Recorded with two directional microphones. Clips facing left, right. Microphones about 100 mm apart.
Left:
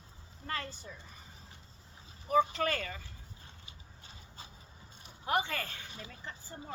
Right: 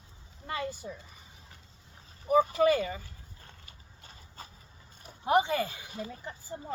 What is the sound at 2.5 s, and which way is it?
Speech, 10° right (ahead or behind).